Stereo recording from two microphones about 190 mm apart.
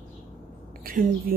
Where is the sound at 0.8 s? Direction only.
45° right (ahead or behind).